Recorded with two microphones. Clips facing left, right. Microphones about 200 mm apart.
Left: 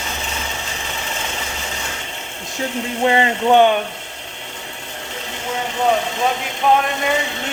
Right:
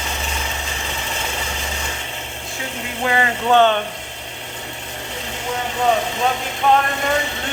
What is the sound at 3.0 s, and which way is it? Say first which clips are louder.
Speech: left 3 dB; 25° left (ahead or behind).